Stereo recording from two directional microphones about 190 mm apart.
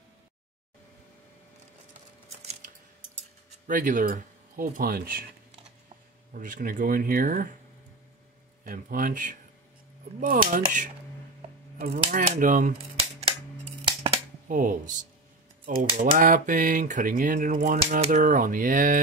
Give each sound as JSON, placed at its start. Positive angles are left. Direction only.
{"t": 3.6, "sound": "speech", "side_deg": -45}
{"t": 6.3, "sound": "speech", "side_deg": -45}
{"t": 8.6, "sound": "speech", "side_deg": -45}
{"t": 14.5, "sound": "speech", "side_deg": -50}